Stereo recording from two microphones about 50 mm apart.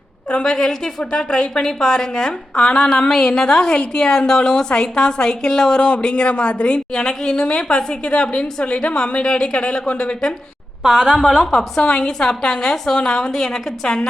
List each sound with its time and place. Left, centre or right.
0.3 s a woman's voice: centre
10.8 s a woman's voice: centre
11.5 s a woman's voice: centre